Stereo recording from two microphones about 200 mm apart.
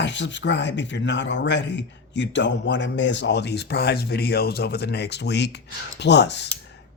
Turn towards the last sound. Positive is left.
turn(degrees=60)  # may be behind; listen again after turning